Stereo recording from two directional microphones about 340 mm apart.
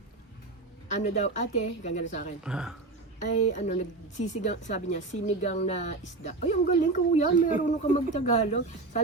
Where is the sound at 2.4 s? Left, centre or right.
Centre.